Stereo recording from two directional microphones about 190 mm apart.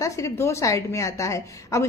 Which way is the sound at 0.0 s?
15° left (ahead or behind).